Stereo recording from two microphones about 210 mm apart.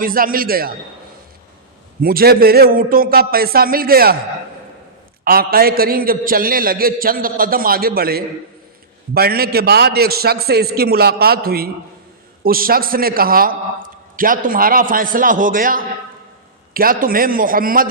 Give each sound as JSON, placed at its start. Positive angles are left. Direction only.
{"t": 0.0, "sound": "a man's voice", "side_deg": -45}
{"t": 2.0, "sound": "a man's voice", "side_deg": -45}
{"t": 5.2, "sound": "a man's voice", "side_deg": -45}